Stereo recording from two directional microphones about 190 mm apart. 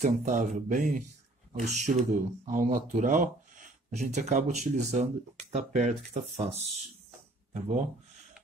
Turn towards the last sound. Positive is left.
turn(degrees=-35)  # may be behind; listen again after turning